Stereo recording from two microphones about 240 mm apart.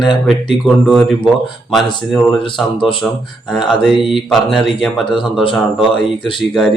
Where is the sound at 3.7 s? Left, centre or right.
Centre.